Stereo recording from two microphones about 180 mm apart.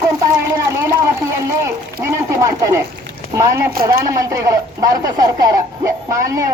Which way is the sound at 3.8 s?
20° right (ahead or behind).